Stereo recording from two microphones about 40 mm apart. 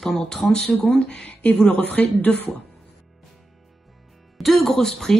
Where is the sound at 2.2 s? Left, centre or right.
Left.